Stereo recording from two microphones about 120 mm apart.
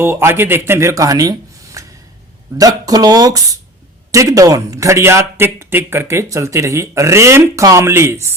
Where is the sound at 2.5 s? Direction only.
30° right (ahead or behind).